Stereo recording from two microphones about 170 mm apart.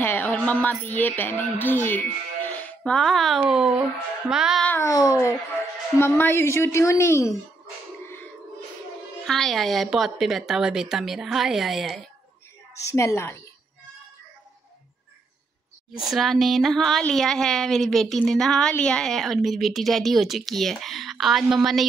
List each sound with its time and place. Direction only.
0.0 s speech: 10° left (ahead or behind)
4.6 s speech: 15° left (ahead or behind)
9.2 s speech: centre (ahead or behind)
12.9 s speech: 15° left (ahead or behind)
16.0 s speech: centre (ahead or behind)